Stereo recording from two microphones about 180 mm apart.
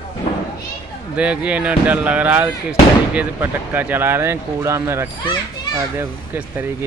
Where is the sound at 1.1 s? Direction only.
5° right (ahead or behind).